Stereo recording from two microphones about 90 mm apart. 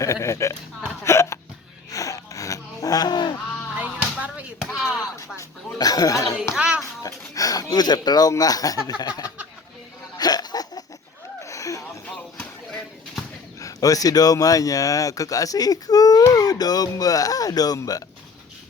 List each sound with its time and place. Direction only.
0.0 s speech: 35° left (ahead or behind)
1.0 s hiccup: 30° left (ahead or behind)
1.9 s gasp: 40° left (ahead or behind)
3.8 s music: 15° right (ahead or behind)
4.7 s chop: 10° right (ahead or behind)
5.4 s a sound: 45° left (ahead or behind)
6.5 s hands: 10° right (ahead or behind)
7.0 s speech: 40° left (ahead or behind)
10.2 s a sound: 45° left (ahead or behind)
13.6 s speech: 40° left (ahead or behind)